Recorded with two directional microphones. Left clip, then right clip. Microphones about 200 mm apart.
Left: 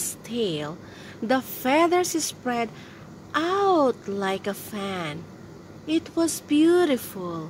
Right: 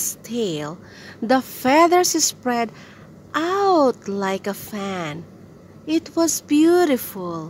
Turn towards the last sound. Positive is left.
turn(degrees=-20)  # may be behind; listen again after turning